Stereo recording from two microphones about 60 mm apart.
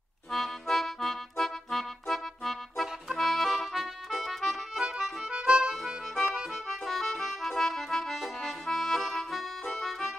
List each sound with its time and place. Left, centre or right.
0.3 s accordion: centre
5.3 s accordion: centre
6.7 s music: centre